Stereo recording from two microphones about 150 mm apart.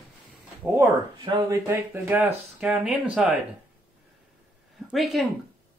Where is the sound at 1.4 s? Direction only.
15° right (ahead or behind).